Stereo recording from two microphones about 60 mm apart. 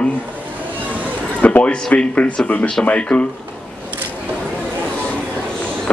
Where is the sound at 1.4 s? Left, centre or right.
Left.